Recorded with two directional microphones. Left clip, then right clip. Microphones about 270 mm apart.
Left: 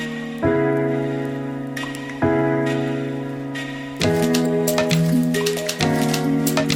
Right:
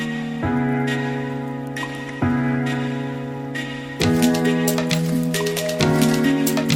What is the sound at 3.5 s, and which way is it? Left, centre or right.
Music, centre.